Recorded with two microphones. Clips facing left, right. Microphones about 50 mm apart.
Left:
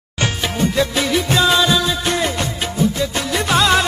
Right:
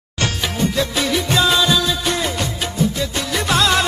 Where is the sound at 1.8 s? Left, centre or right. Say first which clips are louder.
Left 1 dB; centre.